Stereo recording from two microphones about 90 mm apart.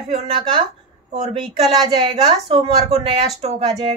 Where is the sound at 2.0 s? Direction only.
65° right (ahead or behind).